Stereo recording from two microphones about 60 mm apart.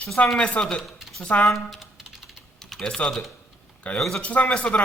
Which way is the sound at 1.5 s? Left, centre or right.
Centre.